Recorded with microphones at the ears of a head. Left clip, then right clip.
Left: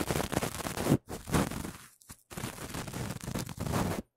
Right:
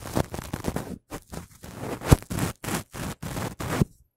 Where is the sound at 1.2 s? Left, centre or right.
Left.